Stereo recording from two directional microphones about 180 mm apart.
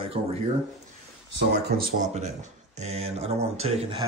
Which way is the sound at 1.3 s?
60° right (ahead or behind).